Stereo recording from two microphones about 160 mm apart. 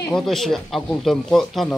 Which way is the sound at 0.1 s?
Centre (ahead or behind).